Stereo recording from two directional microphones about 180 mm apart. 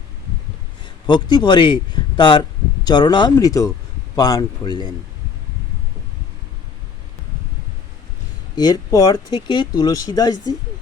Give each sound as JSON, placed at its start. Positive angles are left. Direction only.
{"t": 1.0, "sound": "speech", "side_deg": 25}
{"t": 8.5, "sound": "speech", "side_deg": 20}